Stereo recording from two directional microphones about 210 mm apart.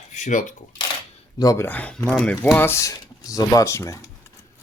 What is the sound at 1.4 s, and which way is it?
Speech, 15° left (ahead or behind).